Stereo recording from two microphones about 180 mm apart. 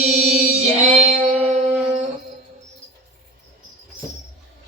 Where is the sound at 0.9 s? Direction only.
40° right (ahead or behind).